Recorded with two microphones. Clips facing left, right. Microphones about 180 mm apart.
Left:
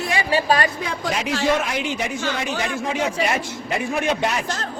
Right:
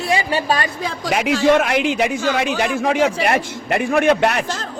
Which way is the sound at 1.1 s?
70° right (ahead or behind).